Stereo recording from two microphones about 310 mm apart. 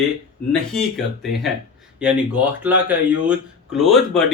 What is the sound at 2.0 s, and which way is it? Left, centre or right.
Speech, centre.